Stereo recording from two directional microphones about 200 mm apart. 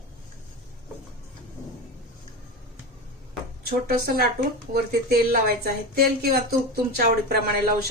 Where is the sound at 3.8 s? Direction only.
50° right (ahead or behind).